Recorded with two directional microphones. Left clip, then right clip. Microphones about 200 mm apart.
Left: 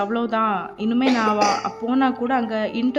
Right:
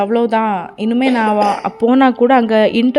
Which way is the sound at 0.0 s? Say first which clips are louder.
Right 7 dB; 30° right (ahead or behind).